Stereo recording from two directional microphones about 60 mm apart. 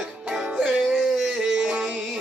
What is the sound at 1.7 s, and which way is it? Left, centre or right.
Music, right.